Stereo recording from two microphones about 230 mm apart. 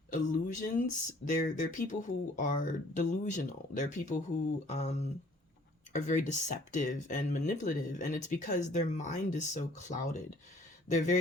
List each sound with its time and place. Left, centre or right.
0.1 s speech: left
4.6 s a sound: left
5.9 s speech: left